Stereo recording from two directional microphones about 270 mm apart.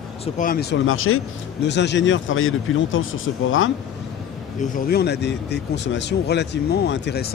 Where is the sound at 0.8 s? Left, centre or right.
Left.